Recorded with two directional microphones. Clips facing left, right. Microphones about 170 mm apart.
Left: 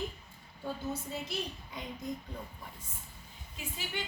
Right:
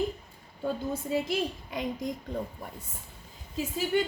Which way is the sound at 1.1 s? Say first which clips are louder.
Right 10 dB; 90° right.